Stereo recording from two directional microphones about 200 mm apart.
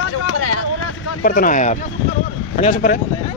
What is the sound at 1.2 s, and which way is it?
A man's voice, 45° left (ahead or behind).